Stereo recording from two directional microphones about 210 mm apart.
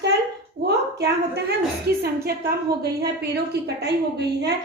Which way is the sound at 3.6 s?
50° right (ahead or behind).